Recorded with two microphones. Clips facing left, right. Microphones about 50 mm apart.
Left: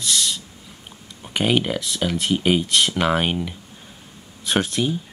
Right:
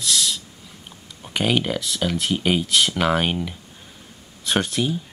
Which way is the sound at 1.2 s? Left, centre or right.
Centre.